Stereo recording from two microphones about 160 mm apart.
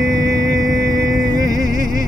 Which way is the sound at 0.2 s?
20° right (ahead or behind).